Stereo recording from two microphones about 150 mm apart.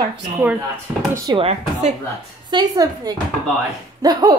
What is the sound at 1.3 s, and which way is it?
Speech, 40° right (ahead or behind).